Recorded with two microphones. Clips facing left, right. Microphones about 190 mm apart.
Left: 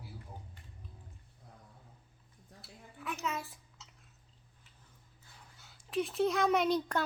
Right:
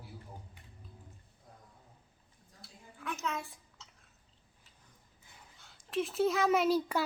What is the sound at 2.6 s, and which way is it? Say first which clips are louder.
Dishes: even; centre (ahead or behind).